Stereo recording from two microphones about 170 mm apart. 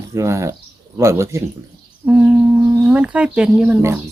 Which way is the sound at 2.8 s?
10° right (ahead or behind).